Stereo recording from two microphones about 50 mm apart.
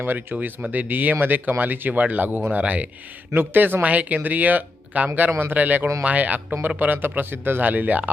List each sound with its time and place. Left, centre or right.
0.0 s speech: right
3.3 s speech: right
3.8 s speech: right